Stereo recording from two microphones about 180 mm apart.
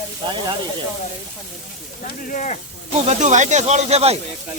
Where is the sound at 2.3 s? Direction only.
45° left (ahead or behind).